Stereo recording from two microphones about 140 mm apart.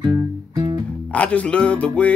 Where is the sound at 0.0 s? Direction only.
30° right (ahead or behind).